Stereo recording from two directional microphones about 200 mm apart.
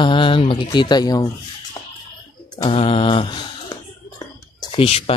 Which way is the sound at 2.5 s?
25° left (ahead or behind).